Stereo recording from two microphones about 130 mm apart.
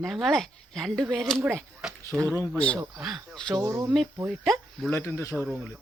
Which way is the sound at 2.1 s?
25° right (ahead or behind).